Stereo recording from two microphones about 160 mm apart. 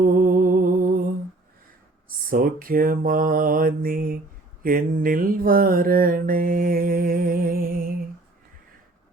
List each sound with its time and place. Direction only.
0.0 s music: 60° right (ahead or behind)
2.0 s mantra: 60° right (ahead or behind)